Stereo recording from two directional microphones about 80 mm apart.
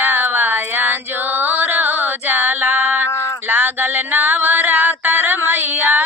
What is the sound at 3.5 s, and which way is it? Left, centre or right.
Music, right.